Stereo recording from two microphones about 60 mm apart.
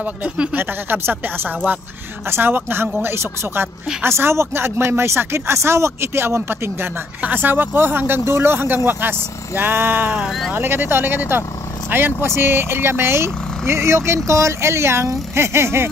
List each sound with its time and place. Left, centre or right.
0.6 s speech: right
7.2 s speech: right